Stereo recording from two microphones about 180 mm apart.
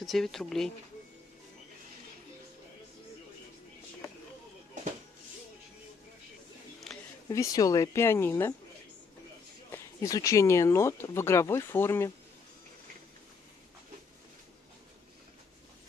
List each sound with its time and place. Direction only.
0.0 s speech: centre (ahead or behind)
6.9 s a sound: centre (ahead or behind)
7.2 s speech: 20° left (ahead or behind)
9.7 s speech: 15° left (ahead or behind)